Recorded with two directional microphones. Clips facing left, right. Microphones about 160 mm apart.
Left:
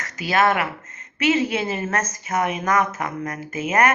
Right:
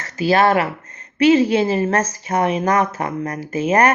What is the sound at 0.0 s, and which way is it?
A woman's voice, 30° right (ahead or behind).